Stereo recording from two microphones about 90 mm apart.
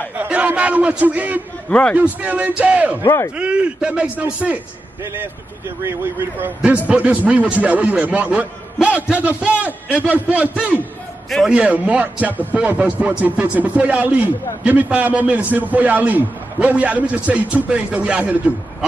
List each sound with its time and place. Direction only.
0.1 s a man's voice: 20° right (ahead or behind)
1.7 s a man's voice: 10° left (ahead or behind)
2.0 s a man's voice: 15° right (ahead or behind)
6.6 s a man's voice: 15° right (ahead or behind)